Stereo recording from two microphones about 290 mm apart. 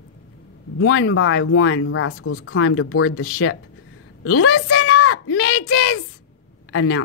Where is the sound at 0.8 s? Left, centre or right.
Left.